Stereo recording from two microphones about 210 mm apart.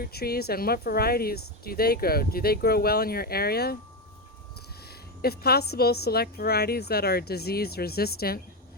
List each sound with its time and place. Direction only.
0.0 s a woman's voice: 50° left (ahead or behind)
4.9 s a woman's voice: 50° left (ahead or behind)